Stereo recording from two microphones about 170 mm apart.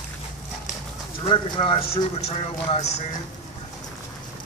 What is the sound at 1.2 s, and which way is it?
A man's voice, 35° left (ahead or behind).